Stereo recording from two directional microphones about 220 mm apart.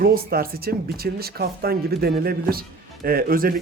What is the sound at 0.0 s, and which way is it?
Speech, 45° right (ahead or behind).